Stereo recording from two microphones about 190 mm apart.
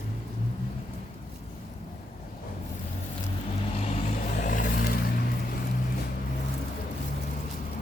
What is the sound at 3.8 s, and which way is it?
Vehicle, 40° left (ahead or behind).